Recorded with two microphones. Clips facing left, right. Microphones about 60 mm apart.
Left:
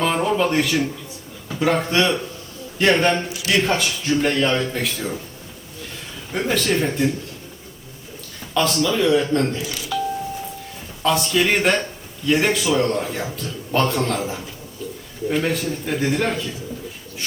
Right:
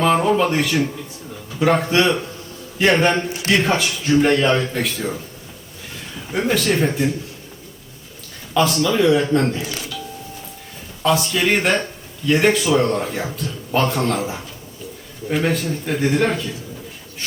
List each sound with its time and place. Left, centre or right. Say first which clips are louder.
0.0 s a man's voice: right 3 dB; centre
6.3 s speech: right 2 dB; centre
8.5 s a man's voice: right 2 dB; centre
9.6 s speech: right 1 dB; right
11.0 s speech: right 1 dB; centre